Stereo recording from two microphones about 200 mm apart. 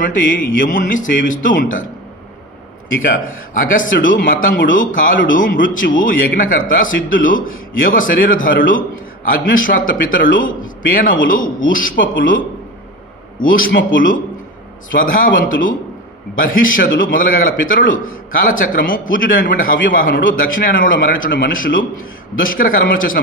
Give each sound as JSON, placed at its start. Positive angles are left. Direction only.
{"t": 0.6, "sound": "a man's voice", "side_deg": 45}
{"t": 3.0, "sound": "a man's voice", "side_deg": 45}